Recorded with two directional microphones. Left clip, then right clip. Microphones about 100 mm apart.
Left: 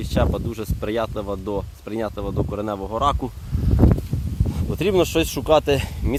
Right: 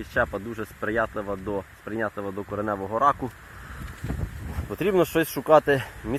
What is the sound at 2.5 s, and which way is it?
Speech, 20° left (ahead or behind).